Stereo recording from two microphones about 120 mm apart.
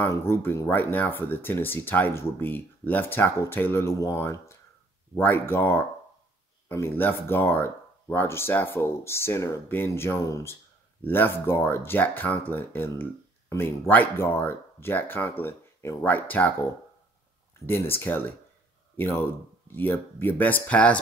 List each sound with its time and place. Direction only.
0.0 s speech: 20° left (ahead or behind)
17.6 s speech: 20° left (ahead or behind)